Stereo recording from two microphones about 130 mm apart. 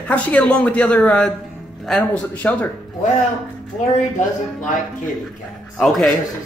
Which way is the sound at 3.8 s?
70° left (ahead or behind).